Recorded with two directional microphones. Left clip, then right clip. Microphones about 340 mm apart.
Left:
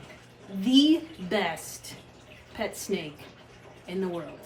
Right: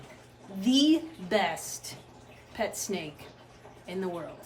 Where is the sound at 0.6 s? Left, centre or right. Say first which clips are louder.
Left 2 dB; centre.